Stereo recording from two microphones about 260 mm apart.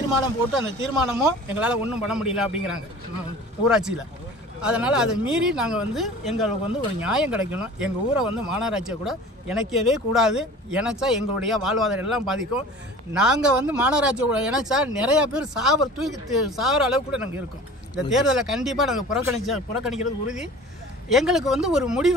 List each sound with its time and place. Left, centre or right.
0.7 s speech: centre